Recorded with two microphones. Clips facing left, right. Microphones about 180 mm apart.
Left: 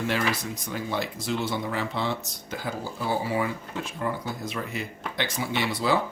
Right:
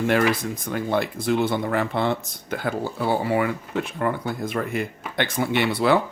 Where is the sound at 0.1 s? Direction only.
55° right (ahead or behind).